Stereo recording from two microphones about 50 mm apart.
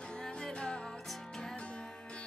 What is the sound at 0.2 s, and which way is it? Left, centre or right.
Music, centre.